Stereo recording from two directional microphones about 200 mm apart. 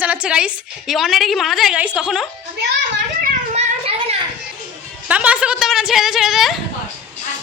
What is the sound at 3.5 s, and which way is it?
Cat, 35° right (ahead or behind).